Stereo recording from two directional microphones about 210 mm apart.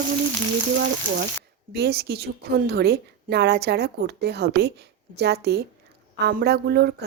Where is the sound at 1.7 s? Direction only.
50° right (ahead or behind).